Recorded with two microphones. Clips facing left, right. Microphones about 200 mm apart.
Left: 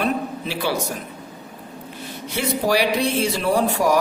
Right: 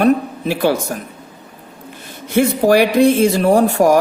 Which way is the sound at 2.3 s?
50° right (ahead or behind).